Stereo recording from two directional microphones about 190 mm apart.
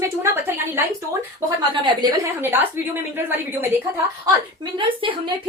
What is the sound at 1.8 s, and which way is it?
Speech, 20° right (ahead or behind).